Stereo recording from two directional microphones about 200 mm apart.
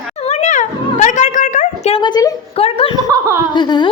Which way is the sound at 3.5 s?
20° left (ahead or behind).